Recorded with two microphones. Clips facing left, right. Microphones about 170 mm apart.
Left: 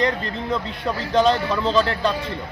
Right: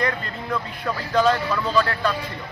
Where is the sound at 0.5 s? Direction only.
25° left (ahead or behind).